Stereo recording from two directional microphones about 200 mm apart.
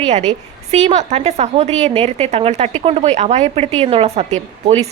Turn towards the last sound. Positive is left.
turn(degrees=-30)  # may be behind; listen again after turning